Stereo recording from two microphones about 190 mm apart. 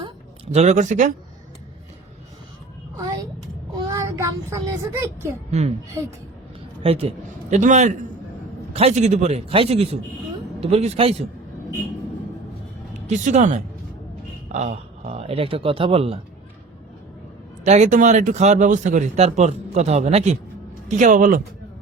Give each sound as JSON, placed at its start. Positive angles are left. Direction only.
{"t": 0.5, "sound": "speech", "side_deg": -35}
{"t": 3.8, "sound": "a child's voice", "side_deg": -15}
{"t": 5.5, "sound": "speech", "side_deg": -35}
{"t": 6.8, "sound": "speech", "side_deg": -30}
{"t": 12.9, "sound": "speech", "side_deg": -40}
{"t": 17.6, "sound": "speech", "side_deg": -35}